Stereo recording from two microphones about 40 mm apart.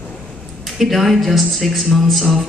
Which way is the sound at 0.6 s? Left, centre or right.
Centre.